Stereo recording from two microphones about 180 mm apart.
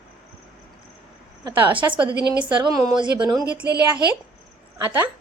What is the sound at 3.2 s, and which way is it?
Speech, 5° right (ahead or behind).